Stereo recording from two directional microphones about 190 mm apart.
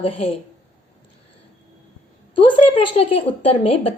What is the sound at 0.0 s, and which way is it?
Speech, 30° left (ahead or behind).